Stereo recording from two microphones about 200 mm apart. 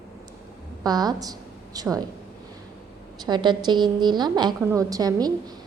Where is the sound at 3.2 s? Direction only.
20° right (ahead or behind).